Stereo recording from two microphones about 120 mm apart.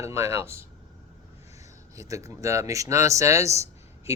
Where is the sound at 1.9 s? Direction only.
25° right (ahead or behind).